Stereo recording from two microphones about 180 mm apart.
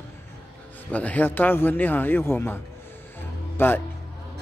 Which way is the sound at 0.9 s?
10° left (ahead or behind).